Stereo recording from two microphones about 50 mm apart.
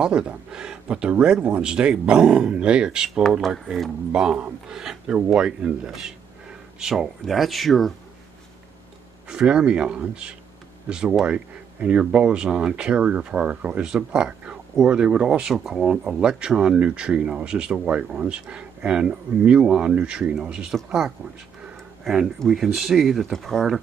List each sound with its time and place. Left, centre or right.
0.0 s speech: centre
9.3 s speech: centre
22.0 s speech: centre